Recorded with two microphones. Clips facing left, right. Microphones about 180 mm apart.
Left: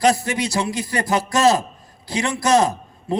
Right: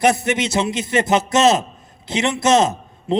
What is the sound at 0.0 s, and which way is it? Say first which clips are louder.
A man's voice: right 1 dB; 20° right (ahead or behind).